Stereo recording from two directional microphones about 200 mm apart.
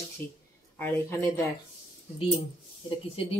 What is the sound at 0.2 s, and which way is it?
Speech, 10° left (ahead or behind).